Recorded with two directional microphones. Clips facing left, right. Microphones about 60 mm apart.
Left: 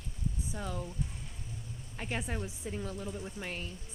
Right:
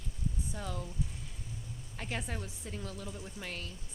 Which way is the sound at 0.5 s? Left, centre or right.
Centre.